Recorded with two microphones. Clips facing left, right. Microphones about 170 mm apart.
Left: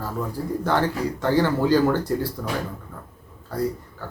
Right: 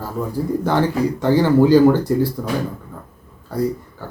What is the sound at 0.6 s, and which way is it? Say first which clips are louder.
Speech: right 4 dB; 15° right (ahead or behind).